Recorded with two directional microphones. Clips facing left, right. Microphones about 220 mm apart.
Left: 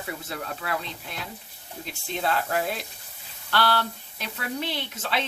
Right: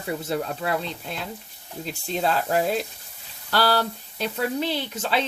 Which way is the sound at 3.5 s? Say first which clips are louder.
Right 3 dB; 35° right (ahead or behind).